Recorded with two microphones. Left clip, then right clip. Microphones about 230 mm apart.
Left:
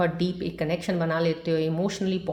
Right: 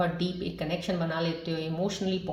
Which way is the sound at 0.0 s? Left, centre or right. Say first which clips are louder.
Left 4 dB; left.